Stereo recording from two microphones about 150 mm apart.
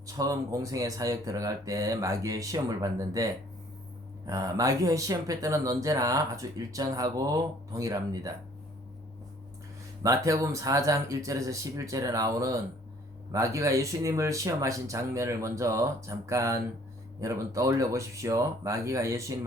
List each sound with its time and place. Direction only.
0.0 s speech: 20° right (ahead or behind)
4.3 s speech: 25° right (ahead or behind)
10.0 s speech: 20° right (ahead or behind)